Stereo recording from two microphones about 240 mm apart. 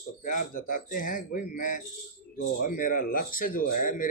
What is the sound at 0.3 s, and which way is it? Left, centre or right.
Speech, left.